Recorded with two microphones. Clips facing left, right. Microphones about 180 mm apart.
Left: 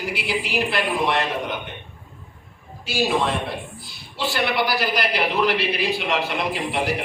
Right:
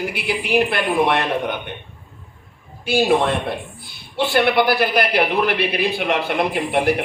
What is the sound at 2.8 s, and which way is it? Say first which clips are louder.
A man's voice: right 5 dB; 55° right (ahead or behind).